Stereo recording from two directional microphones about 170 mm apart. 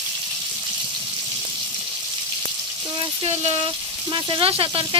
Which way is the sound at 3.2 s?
40° right (ahead or behind).